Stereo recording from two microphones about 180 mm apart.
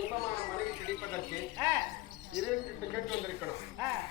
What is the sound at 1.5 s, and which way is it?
Speech, 20° right (ahead or behind).